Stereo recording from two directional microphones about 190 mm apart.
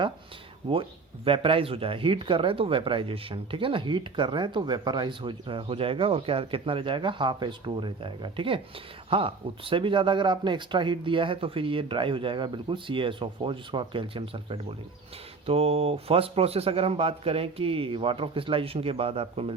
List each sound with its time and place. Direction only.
0.7 s speech: 30° right (ahead or behind)